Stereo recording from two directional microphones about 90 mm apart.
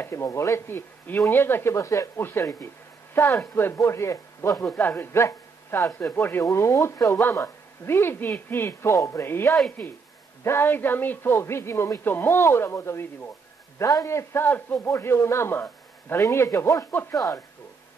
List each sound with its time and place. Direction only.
0.0 s speech: 30° left (ahead or behind)
3.7 s a man's voice: 30° left (ahead or behind)
4.7 s speech: 20° left (ahead or behind)
5.9 s a man's voice: 20° left (ahead or behind); by 16.8 s 35° left (ahead or behind)